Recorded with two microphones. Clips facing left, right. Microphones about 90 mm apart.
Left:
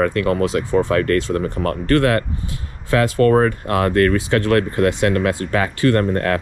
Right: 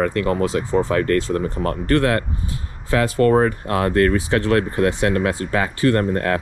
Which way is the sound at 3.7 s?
50° left (ahead or behind).